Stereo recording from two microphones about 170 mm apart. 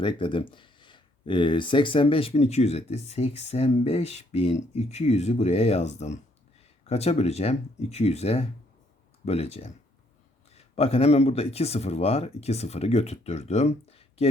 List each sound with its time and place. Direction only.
0.0 s speech: 30° left (ahead or behind)